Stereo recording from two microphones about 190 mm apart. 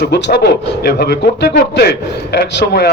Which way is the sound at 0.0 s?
60° left (ahead or behind).